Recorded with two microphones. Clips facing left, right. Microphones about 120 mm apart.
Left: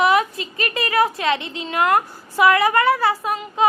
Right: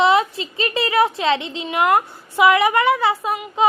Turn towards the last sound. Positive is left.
turn(degrees=-20)  # may be behind; listen again after turning